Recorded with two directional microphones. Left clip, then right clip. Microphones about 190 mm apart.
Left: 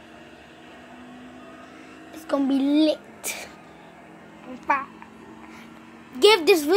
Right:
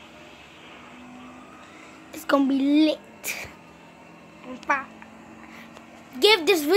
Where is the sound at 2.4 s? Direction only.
10° right (ahead or behind).